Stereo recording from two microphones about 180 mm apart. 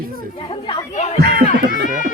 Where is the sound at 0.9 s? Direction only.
40° left (ahead or behind).